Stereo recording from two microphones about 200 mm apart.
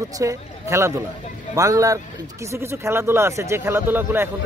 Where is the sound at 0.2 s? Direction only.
15° right (ahead or behind).